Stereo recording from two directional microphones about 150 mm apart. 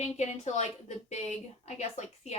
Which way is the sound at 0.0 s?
50° left (ahead or behind).